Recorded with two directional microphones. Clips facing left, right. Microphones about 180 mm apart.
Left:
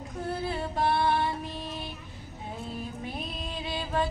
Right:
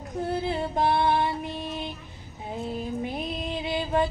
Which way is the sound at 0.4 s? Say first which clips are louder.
Right 3 dB; 20° right (ahead or behind).